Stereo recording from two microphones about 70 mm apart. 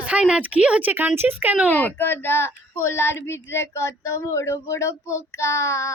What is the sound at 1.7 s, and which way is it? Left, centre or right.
Speech, left.